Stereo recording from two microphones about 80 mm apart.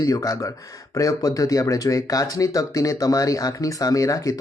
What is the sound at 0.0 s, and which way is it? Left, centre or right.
Speech, left.